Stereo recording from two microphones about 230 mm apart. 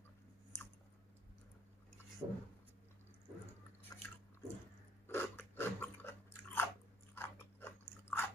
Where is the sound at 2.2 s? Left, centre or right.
Centre.